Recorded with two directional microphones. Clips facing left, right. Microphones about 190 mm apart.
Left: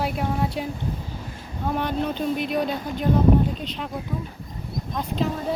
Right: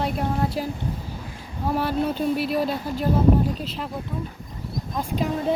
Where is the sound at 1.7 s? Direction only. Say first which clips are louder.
Right 2 dB; 5° right (ahead or behind).